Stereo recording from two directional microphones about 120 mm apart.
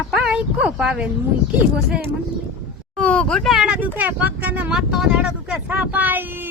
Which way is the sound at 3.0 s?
10° left (ahead or behind).